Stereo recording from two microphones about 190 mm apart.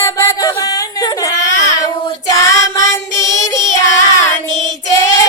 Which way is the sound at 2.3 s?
15° left (ahead or behind).